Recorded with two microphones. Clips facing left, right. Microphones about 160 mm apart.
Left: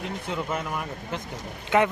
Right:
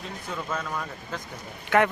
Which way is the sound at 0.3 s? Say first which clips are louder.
Left 1 dB; 15° left (ahead or behind).